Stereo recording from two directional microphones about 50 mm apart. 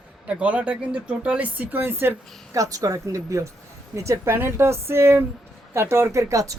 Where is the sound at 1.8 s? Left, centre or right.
Right.